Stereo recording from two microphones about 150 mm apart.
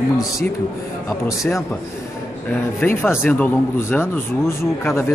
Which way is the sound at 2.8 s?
15° left (ahead or behind).